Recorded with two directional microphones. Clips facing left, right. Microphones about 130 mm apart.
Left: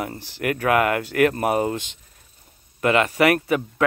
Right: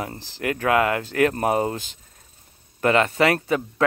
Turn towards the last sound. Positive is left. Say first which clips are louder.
# left 1 dB
turn(degrees=-25)  # may be behind; listen again after turning